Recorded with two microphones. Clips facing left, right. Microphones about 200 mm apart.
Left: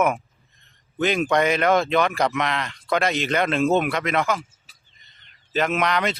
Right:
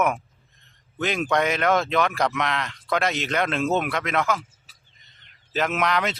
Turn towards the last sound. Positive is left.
turn(degrees=0)  # may be behind; listen again after turning